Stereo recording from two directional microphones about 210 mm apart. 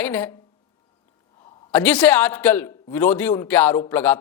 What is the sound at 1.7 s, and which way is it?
A man's voice, 5° left (ahead or behind).